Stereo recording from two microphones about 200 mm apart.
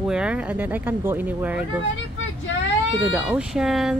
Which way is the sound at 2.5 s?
75° left (ahead or behind).